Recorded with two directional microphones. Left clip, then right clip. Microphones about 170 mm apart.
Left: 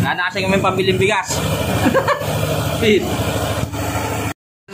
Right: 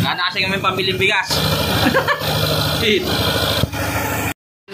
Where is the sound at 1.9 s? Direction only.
10° left (ahead or behind).